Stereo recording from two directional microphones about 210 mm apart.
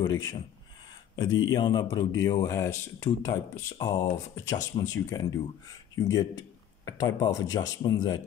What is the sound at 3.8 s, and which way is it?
Speech, 15° left (ahead or behind).